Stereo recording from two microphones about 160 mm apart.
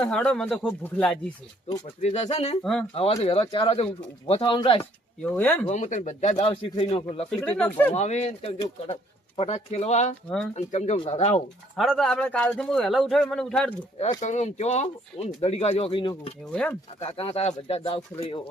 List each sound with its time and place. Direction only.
0.0 s speech: 5° left (ahead or behind)
2.0 s speech: 45° left (ahead or behind)
4.8 s speech: 10° left (ahead or behind)
5.6 s speech: 50° left (ahead or behind)
7.3 s speech: 10° left (ahead or behind)
7.9 s speech: 45° left (ahead or behind)
10.2 s speech: 5° left (ahead or behind)
10.5 s speech: 45° left (ahead or behind)
11.8 s speech: centre (ahead or behind)
14.0 s speech: 45° left (ahead or behind); by 16.3 s 30° left (ahead or behind)
16.5 s speech: 5° left (ahead or behind)
17.0 s speech: 35° left (ahead or behind)